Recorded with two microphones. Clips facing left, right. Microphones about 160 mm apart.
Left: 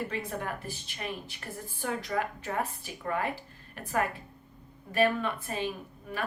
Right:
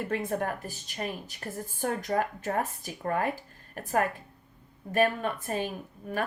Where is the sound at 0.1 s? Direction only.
50° right (ahead or behind).